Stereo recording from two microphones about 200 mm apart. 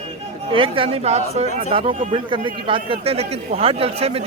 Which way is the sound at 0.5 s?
25° right (ahead or behind).